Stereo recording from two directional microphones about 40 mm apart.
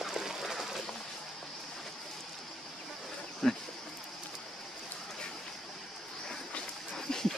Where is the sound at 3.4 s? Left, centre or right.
Centre.